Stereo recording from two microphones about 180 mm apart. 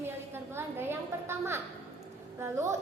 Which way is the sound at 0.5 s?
15° right (ahead or behind).